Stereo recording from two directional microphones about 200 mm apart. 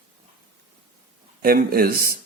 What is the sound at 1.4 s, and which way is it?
Speech, 45° right (ahead or behind).